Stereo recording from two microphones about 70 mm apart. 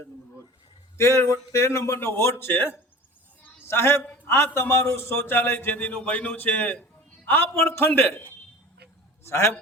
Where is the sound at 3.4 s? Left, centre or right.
Left.